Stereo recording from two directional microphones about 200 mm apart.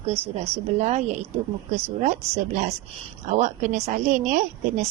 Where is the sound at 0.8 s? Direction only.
35° right (ahead or behind).